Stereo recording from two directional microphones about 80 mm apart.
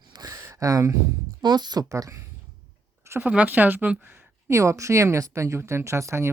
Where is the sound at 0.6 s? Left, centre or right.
Right.